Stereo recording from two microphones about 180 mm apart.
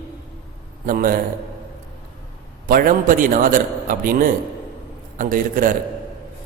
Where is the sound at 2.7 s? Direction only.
50° right (ahead or behind).